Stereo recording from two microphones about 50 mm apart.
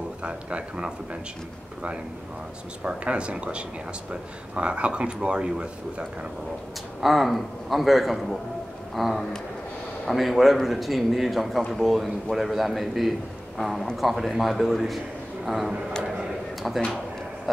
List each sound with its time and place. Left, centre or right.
0.2 s speech: right
2.8 s speech: right
7.0 s a man's voice: centre